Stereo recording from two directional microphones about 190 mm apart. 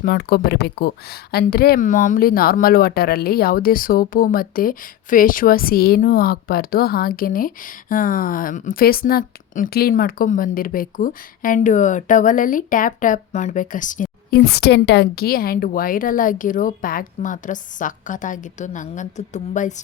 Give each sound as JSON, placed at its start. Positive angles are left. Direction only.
{"t": 0.0, "sound": "speech", "side_deg": 50}